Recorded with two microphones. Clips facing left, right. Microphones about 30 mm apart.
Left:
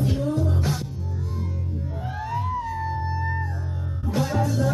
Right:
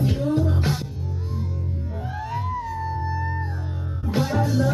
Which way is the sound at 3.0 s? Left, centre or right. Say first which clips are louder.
Even; centre.